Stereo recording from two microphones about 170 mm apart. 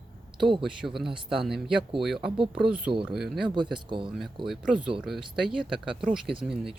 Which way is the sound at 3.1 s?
Centre (ahead or behind).